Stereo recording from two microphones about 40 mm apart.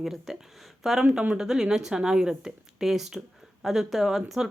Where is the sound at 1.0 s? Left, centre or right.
Centre.